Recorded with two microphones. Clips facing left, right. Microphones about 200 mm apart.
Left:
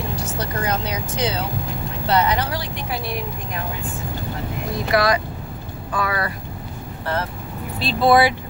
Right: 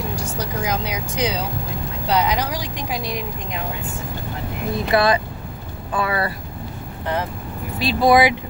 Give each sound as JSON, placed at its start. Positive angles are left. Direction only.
{"t": 0.3, "sound": "speech", "side_deg": -10}
{"t": 4.9, "sound": "speech", "side_deg": -30}
{"t": 7.8, "sound": "speech", "side_deg": -15}